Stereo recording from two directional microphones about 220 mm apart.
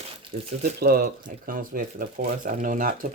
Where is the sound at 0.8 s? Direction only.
45° right (ahead or behind).